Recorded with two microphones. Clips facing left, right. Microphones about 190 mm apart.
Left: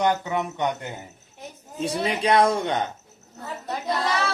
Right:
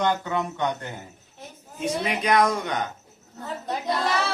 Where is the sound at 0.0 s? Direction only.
15° left (ahead or behind).